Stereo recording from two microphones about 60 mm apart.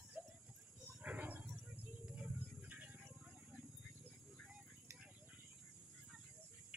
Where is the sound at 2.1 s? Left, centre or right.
Right.